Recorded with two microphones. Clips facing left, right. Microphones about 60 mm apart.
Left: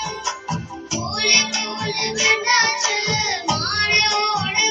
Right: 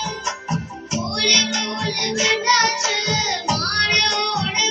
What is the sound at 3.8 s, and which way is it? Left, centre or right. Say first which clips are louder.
Music: left 2 dB; left.